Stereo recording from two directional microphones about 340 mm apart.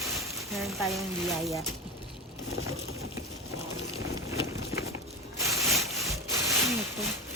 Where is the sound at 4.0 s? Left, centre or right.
Centre.